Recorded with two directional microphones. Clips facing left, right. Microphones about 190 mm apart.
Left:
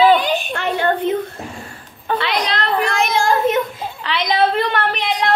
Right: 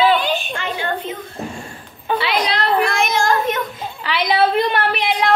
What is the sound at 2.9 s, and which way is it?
Speech, 30° left (ahead or behind).